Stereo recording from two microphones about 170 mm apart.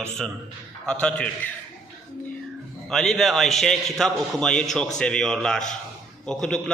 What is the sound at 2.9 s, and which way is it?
A man's voice, centre (ahead or behind).